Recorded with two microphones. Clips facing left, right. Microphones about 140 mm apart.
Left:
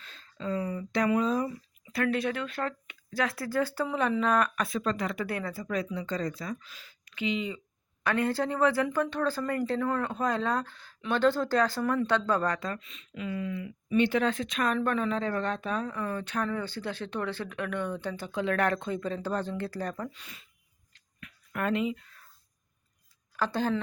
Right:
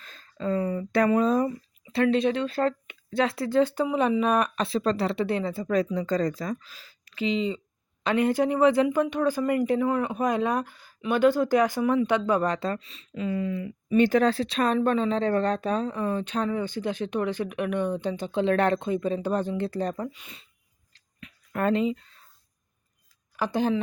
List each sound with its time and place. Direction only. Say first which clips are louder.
0.0 s speech: right 5 dB; 45° right (ahead or behind)
1.8 s speech: right 6 dB; 25° right (ahead or behind)
5.6 s speech: right 8 dB; 40° right (ahead or behind)
8.0 s speech: right 5 dB; 20° right (ahead or behind)
12.6 s speech: right 6 dB; 30° right (ahead or behind)
21.2 s a sound: right 4 dB; 25° right (ahead or behind)
21.6 s speech: right 5 dB; 35° right (ahead or behind)
23.4 s speech: right 4 dB; 15° right (ahead or behind)